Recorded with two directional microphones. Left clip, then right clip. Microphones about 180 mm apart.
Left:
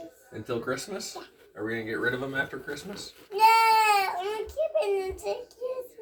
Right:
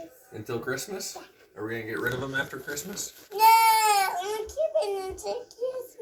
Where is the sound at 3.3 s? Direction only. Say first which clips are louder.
Right 1 dB; centre (ahead or behind).